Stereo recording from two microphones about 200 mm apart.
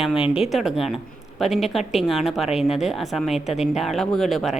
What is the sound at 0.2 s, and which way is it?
Speech, 30° left (ahead or behind).